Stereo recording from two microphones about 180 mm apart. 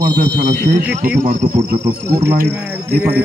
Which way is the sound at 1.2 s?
45° right (ahead or behind).